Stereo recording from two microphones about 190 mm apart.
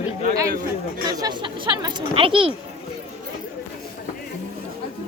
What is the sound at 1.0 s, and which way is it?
Speech, 20° right (ahead or behind).